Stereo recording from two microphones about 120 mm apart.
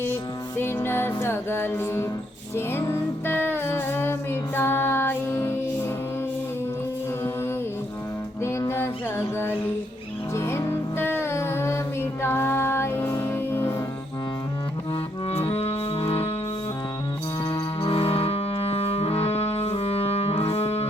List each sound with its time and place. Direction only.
0.0 s music: 15° left (ahead or behind)
8.4 s music: 20° left (ahead or behind)
15.3 s music: 55° left (ahead or behind)
17.5 s music: 50° left (ahead or behind)